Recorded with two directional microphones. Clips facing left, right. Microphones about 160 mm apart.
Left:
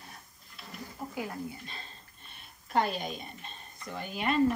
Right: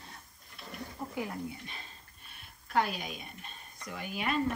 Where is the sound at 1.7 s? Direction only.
15° right (ahead or behind).